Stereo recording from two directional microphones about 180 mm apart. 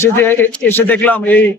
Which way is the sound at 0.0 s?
10° left (ahead or behind).